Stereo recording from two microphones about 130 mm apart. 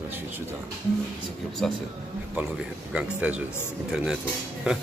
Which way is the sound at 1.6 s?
5° left (ahead or behind).